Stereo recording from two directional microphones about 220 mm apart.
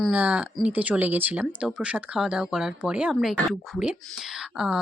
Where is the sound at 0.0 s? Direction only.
5° right (ahead or behind).